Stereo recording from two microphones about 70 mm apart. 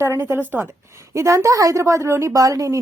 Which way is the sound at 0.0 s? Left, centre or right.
Right.